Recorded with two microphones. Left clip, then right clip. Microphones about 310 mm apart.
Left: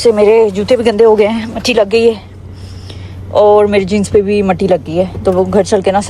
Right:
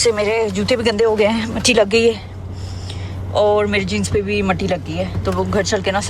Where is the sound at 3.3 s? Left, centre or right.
Centre.